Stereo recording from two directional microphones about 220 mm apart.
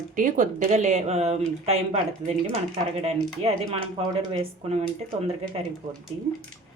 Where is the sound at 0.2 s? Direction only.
35° right (ahead or behind).